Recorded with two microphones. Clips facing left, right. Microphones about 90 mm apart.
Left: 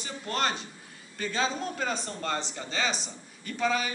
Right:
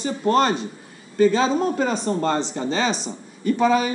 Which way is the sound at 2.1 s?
40° right (ahead or behind).